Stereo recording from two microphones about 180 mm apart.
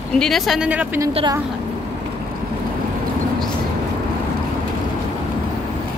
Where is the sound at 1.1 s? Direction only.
25° right (ahead or behind).